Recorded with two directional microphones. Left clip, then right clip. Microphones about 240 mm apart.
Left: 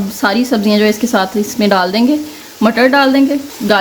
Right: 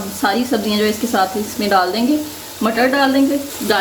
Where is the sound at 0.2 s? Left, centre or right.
Left.